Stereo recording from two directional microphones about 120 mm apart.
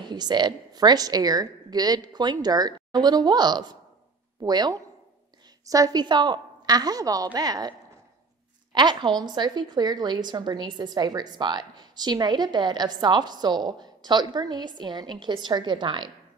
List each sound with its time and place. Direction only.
0.0 s a woman's voice: 35° right (ahead or behind)
8.7 s a woman's voice: 35° right (ahead or behind)